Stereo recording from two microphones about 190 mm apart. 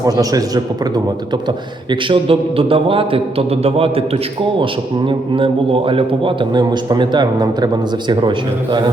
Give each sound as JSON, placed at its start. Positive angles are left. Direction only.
{"t": 0.0, "sound": "a man's voice", "side_deg": -20}